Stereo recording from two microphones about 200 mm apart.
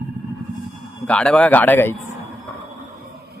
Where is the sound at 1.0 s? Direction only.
5° left (ahead or behind).